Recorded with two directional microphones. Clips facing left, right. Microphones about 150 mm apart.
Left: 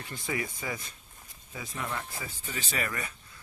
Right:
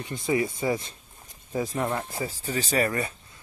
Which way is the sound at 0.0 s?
20° right (ahead or behind).